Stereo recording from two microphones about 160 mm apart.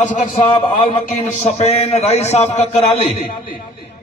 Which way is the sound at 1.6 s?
45° left (ahead or behind).